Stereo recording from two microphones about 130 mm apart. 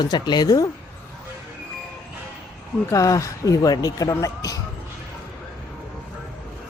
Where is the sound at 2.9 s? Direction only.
25° left (ahead or behind).